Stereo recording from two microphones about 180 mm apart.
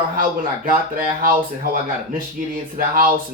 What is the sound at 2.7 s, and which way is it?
Speech, 50° right (ahead or behind).